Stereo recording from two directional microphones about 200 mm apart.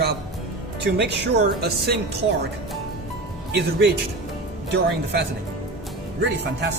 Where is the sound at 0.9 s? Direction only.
55° right (ahead or behind).